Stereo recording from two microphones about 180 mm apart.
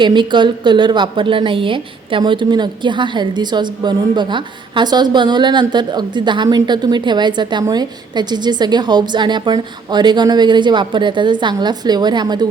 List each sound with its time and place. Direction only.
0.0 s a woman's voice: 25° right (ahead or behind)